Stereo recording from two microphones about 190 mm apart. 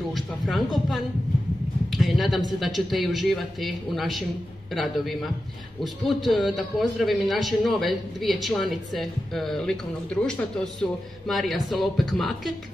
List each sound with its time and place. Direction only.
0.1 s a man's voice: centre (ahead or behind)